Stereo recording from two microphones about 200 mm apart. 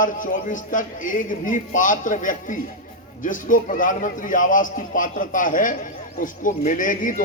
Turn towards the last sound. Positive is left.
turn(degrees=40)  # may be behind; listen again after turning